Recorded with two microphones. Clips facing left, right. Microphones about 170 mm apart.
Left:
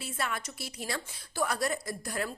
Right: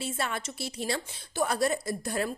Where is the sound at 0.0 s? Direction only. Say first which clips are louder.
Right 3 dB; 30° right (ahead or behind).